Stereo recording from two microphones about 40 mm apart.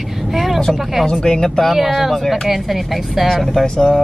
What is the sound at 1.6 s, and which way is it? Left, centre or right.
Speech, centre.